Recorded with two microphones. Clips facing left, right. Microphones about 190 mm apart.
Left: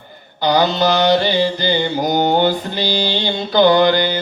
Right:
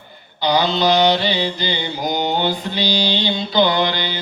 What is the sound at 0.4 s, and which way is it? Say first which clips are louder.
Mantra: left 2 dB; 45° left (ahead or behind).